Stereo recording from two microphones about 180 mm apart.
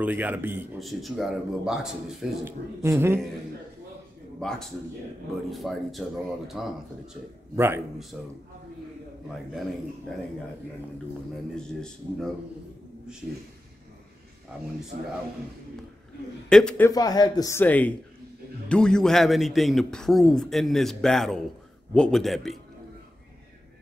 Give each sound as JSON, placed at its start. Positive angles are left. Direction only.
{"t": 0.0, "sound": "a man's voice", "side_deg": -10}
{"t": 2.4, "sound": "a man's voice", "side_deg": -15}
{"t": 4.4, "sound": "a man's voice", "side_deg": 0}
{"t": 7.5, "sound": "a man's voice", "side_deg": -15}
{"t": 11.5, "sound": "a man's voice", "side_deg": 5}
{"t": 14.9, "sound": "speech", "side_deg": -55}
{"t": 16.4, "sound": "a man's voice", "side_deg": 5}
{"t": 16.9, "sound": "a man's voice", "side_deg": 20}